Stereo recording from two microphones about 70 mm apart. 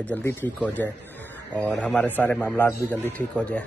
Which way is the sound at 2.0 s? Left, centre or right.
Left.